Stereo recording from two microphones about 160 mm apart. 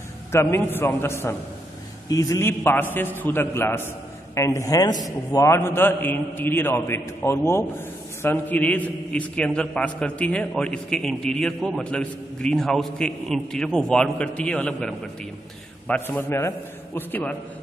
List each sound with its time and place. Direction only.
0.3 s a man's voice: 15° left (ahead or behind)